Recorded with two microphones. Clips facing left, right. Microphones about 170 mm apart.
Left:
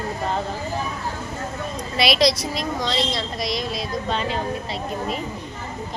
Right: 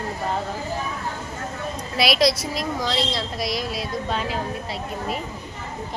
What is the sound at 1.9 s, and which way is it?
A woman's voice, 5° right (ahead or behind).